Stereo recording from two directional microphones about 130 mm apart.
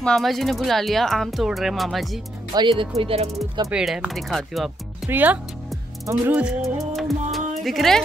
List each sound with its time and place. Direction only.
0.0 s speech: centre (ahead or behind)
2.5 s speech: 40° right (ahead or behind)
3.7 s speech: 5° right (ahead or behind)
5.1 s speech: 15° right (ahead or behind)
6.6 s music: centre (ahead or behind)